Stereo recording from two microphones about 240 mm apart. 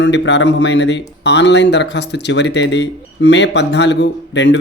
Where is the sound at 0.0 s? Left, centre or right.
Left.